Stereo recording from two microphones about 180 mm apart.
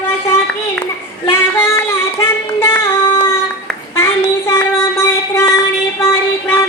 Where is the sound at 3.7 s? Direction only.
15° left (ahead or behind).